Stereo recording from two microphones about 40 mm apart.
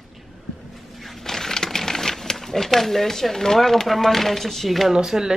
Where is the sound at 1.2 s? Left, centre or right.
Centre.